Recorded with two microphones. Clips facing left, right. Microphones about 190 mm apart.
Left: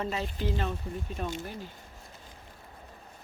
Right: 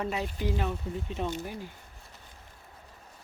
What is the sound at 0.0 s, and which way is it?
Speech, 10° right (ahead or behind).